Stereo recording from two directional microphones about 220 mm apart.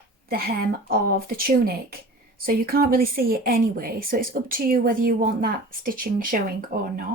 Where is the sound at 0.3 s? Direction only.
45° right (ahead or behind).